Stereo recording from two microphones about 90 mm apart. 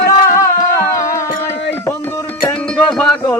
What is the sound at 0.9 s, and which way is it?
Music, 35° left (ahead or behind).